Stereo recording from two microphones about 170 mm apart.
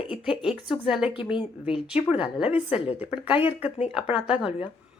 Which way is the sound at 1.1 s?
30° left (ahead or behind).